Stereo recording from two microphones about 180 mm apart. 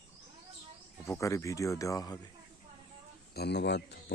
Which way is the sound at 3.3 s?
65° left (ahead or behind).